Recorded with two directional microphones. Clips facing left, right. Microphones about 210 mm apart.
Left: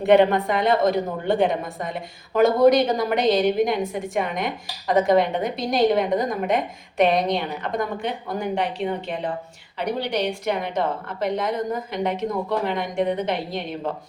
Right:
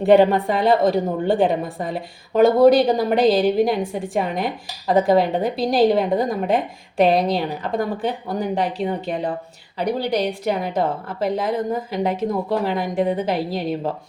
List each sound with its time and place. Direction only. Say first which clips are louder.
0.0 s a woman's voice: right 2 dB; 35° right (ahead or behind)